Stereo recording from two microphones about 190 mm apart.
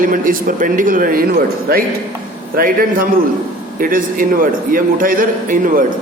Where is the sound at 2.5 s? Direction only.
50° right (ahead or behind).